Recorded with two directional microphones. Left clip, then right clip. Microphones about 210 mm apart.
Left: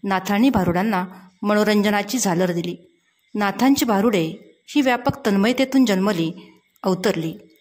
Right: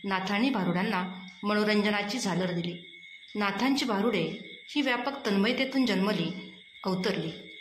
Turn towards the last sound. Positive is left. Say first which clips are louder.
# left 10 dB
turn(degrees=55)  # may be behind; listen again after turning